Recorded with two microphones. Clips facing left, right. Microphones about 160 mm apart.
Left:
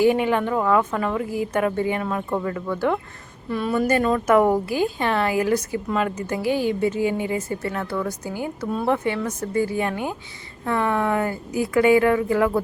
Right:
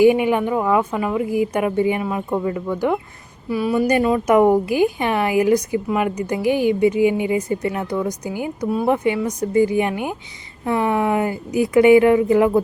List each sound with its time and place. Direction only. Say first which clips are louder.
0.0 s speech: right 4 dB; 15° right (ahead or behind)